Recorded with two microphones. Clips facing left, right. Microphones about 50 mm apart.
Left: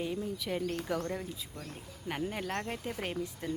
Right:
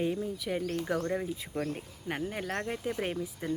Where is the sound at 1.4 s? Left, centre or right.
Right.